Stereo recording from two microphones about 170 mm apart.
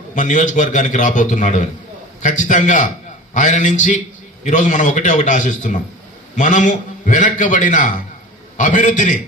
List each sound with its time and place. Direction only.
0.1 s a man's voice: 50° left (ahead or behind)